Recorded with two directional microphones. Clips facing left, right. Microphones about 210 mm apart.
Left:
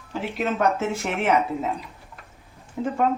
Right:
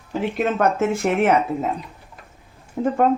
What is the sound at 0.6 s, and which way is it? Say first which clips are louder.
A woman's voice: right 3 dB; 50° right (ahead or behind).